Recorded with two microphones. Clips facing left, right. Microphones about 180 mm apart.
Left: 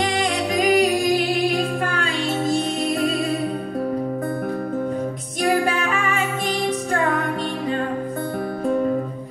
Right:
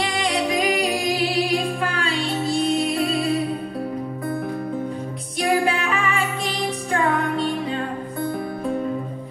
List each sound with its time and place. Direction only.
0.0 s music: 45° left (ahead or behind)
5.4 s music: 40° left (ahead or behind)